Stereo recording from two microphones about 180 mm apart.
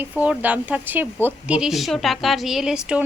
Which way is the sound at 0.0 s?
10° right (ahead or behind).